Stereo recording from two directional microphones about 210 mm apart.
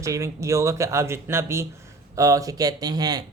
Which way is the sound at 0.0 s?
15° right (ahead or behind).